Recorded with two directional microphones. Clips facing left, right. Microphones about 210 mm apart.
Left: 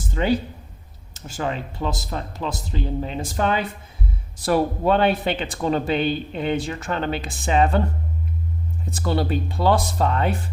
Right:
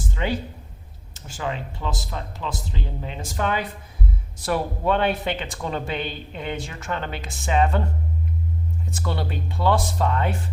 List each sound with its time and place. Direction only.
0.1 s speech: 40° left (ahead or behind)
8.9 s speech: 35° left (ahead or behind)